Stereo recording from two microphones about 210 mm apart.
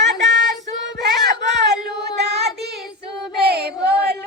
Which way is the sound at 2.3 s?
50° right (ahead or behind).